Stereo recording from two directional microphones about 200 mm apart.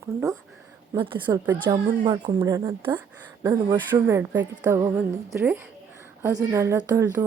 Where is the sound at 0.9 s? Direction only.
25° right (ahead or behind).